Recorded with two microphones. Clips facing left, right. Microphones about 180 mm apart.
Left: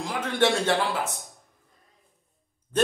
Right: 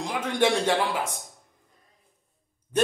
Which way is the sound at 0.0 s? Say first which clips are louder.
Even; 15° right (ahead or behind).